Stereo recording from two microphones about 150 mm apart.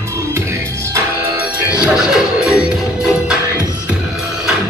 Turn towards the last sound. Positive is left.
turn(degrees=-5)  # may be behind; listen again after turning